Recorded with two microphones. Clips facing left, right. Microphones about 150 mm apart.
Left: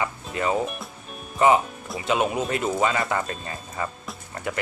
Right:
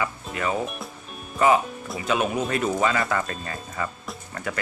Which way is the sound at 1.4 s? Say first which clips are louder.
Left 1 dB; 20° left (ahead or behind).